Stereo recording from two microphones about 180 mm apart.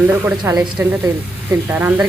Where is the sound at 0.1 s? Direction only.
10° right (ahead or behind).